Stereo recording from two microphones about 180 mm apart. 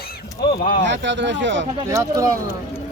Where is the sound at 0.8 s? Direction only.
85° right.